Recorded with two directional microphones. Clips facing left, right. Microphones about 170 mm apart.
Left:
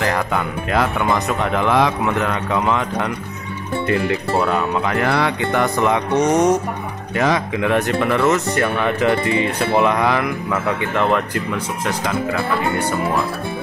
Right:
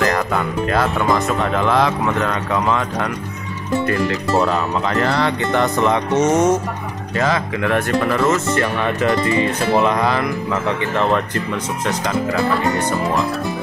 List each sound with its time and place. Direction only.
0.0 s speech: 15° left (ahead or behind)
4.1 s speech: 10° left (ahead or behind)